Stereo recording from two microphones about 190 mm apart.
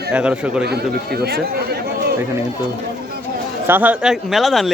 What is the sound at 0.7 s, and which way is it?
Speech, 55° right (ahead or behind).